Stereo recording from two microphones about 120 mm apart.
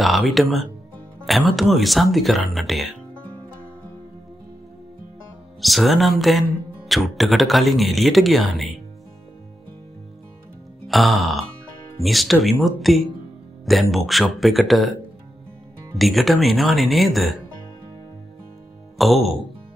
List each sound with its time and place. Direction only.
0.0 s speech: centre (ahead or behind)
5.6 s speech: centre (ahead or behind)
10.9 s speech: centre (ahead or behind)
16.0 s speech: centre (ahead or behind)
18.9 s speech: centre (ahead or behind)